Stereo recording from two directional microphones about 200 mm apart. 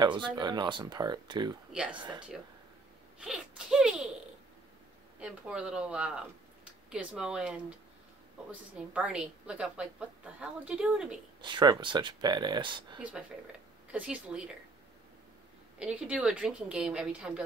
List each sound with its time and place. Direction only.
0.0 s speech: 20° right (ahead or behind)
1.7 s a woman's voice: 5° right (ahead or behind)
5.2 s a woman's voice: 5° right (ahead or behind)
8.7 s a woman's voice: 5° right (ahead or behind)
11.4 s speech: 20° right (ahead or behind)
13.9 s a woman's voice: 5° right (ahead or behind)
15.8 s a woman's voice: 5° right (ahead or behind)